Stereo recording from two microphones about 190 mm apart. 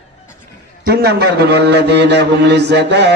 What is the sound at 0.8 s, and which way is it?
A man's voice, 55° right (ahead or behind).